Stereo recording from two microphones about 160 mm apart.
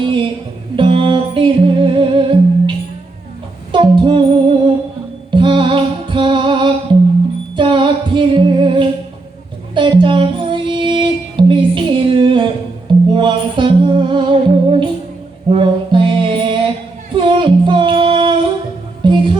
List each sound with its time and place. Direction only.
0.0 s music: 30° right (ahead or behind)
3.7 s female singing: 30° right (ahead or behind)
5.3 s music: 30° right (ahead or behind)
17.2 s female singing: 30° right (ahead or behind)
19.0 s music: 30° right (ahead or behind)